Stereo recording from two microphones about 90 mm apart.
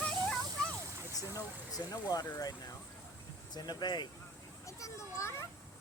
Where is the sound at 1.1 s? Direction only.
40° left (ahead or behind).